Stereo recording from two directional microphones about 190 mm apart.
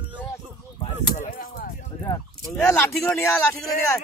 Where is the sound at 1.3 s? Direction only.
45° left (ahead or behind).